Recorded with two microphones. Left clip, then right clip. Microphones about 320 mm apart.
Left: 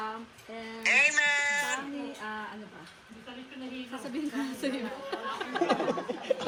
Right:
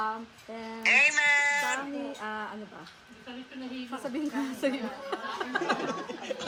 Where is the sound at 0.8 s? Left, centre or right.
Centre.